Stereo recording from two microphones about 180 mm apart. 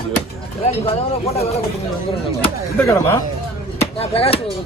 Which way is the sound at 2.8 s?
15° left (ahead or behind).